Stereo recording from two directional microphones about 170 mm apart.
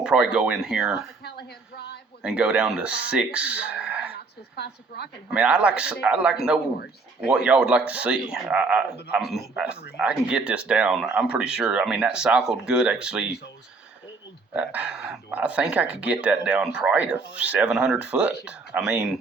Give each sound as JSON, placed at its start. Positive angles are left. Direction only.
{"t": 0.0, "sound": "speech", "side_deg": -5}
{"t": 1.2, "sound": "a sound", "side_deg": 75}
{"t": 2.2, "sound": "speech", "side_deg": -5}
{"t": 4.5, "sound": "a woman's voice", "side_deg": 75}
{"t": 5.3, "sound": "speech", "side_deg": -5}
{"t": 14.5, "sound": "speech", "side_deg": -10}